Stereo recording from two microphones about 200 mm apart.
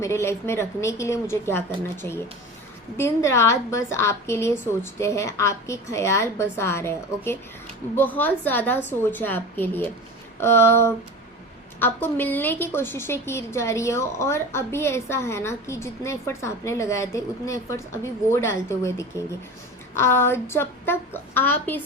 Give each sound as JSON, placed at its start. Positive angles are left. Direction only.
{"t": 0.0, "sound": "a woman's voice", "side_deg": 15}